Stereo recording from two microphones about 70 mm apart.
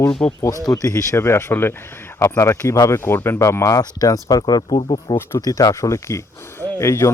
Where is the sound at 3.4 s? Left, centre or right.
Left.